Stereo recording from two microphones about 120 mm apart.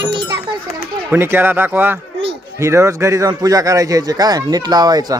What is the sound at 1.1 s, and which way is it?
Speech, 15° right (ahead or behind).